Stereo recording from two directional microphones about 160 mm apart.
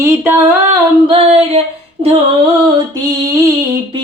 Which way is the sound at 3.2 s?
20° right (ahead or behind).